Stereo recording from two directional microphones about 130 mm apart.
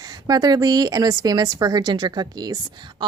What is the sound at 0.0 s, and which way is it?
A woman's voice, 30° right (ahead or behind).